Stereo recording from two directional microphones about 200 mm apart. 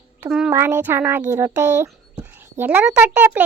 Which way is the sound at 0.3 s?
5° right (ahead or behind).